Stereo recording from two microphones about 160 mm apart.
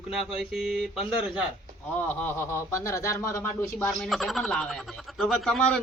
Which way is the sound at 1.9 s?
15° left (ahead or behind).